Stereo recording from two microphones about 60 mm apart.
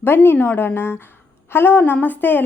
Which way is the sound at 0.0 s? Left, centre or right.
Left.